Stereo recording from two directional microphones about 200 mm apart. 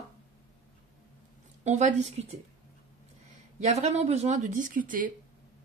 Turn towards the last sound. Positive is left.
turn(degrees=-40)  # may be behind; listen again after turning